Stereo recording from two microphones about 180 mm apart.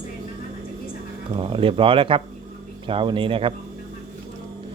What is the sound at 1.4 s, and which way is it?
Speech, 30° right (ahead or behind).